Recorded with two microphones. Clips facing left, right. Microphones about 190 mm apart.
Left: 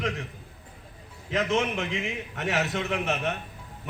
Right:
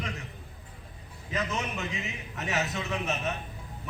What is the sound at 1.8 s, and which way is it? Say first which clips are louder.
A man's voice: left 5 dB; 80° left.